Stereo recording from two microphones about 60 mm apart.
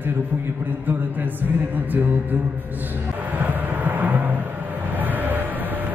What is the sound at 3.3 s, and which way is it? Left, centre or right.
Vehicle, right.